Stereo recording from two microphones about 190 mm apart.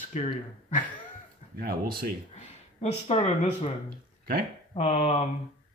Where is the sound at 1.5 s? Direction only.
55° right (ahead or behind).